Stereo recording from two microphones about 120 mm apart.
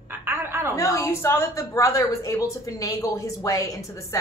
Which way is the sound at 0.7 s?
25° left (ahead or behind).